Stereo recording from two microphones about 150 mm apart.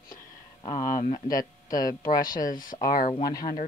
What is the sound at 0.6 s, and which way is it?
Speech, 25° left (ahead or behind).